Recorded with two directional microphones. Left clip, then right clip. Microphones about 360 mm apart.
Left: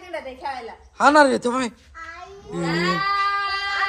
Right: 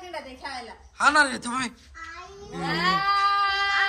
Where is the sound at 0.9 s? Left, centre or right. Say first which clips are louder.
Left 5 dB; centre.